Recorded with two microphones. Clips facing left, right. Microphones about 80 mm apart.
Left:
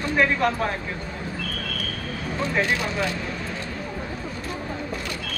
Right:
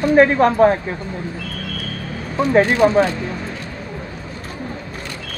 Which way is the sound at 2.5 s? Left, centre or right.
Right.